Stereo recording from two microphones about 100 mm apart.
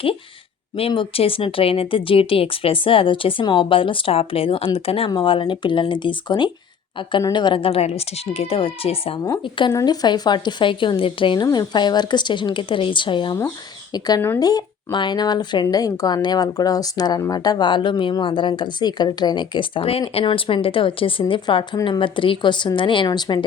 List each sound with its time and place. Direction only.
0.8 s speech: 65° left (ahead or behind)
9.4 s speech: 55° left (ahead or behind)
9.8 s speech: 45° left (ahead or behind)
11.4 s speech: 45° left (ahead or behind)
14.3 s speech: 40° left (ahead or behind)
23.0 s speech: 45° left (ahead or behind)